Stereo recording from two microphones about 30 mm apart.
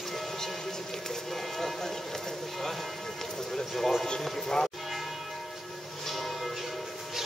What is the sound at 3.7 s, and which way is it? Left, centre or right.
Music, centre.